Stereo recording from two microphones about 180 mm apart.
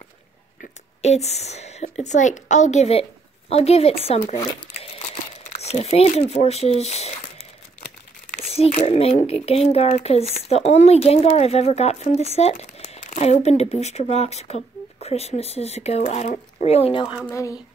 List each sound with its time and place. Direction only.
1.0 s speech: 35° left (ahead or behind)
4.4 s crumpling: 25° left (ahead or behind)
5.0 s crumpling: 35° left (ahead or behind)
8.5 s speech: 35° left (ahead or behind)
17.3 s speech: 15° left (ahead or behind)